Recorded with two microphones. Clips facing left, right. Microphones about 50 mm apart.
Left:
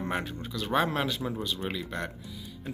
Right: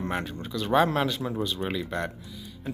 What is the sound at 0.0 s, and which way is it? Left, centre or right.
Speech, centre.